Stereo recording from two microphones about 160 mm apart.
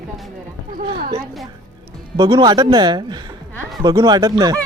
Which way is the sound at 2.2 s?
35° right (ahead or behind).